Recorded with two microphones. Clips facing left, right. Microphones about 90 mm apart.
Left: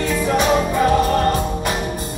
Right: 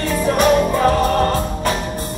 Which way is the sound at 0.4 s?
20° left (ahead or behind).